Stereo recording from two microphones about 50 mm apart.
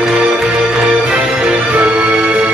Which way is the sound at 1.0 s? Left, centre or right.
Right.